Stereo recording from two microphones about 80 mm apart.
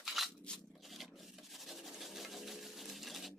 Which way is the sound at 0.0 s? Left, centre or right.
Centre.